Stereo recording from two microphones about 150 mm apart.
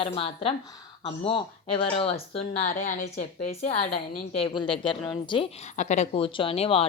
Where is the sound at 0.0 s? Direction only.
40° left (ahead or behind).